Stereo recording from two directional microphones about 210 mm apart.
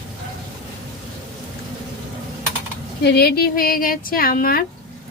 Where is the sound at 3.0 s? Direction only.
50° left (ahead or behind).